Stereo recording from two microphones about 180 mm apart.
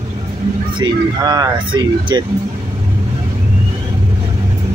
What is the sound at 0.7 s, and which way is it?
Speech, 20° right (ahead or behind).